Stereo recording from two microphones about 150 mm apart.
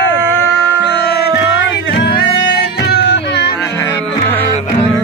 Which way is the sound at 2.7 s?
90° left.